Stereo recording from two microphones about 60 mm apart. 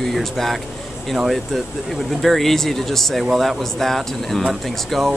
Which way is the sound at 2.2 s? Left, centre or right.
Centre.